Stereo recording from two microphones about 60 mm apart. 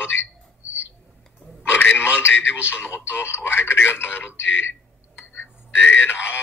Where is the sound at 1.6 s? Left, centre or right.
Left.